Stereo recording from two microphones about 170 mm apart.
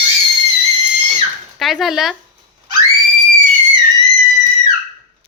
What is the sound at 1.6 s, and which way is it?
Speech, centre (ahead or behind).